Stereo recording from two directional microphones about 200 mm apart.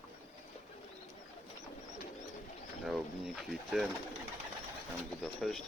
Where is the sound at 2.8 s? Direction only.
Centre (ahead or behind).